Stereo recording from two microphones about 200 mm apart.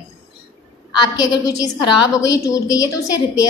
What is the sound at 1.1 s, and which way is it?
A woman's voice, 20° left (ahead or behind).